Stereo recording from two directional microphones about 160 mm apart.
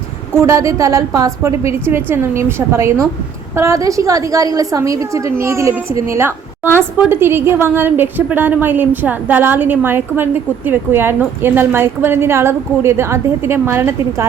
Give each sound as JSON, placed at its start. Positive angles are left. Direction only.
{"t": 0.4, "sound": "a woman's voice", "side_deg": -20}
{"t": 6.7, "sound": "a woman's voice", "side_deg": -15}